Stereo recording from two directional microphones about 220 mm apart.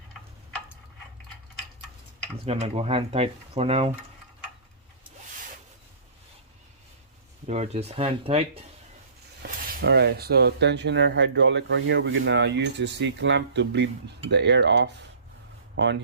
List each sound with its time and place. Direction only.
2.4 s speech: 25° right (ahead or behind)
7.4 s speech: 30° right (ahead or behind)
9.4 s speech: 45° right (ahead or behind)